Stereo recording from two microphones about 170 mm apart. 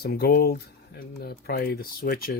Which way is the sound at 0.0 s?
65° left (ahead or behind).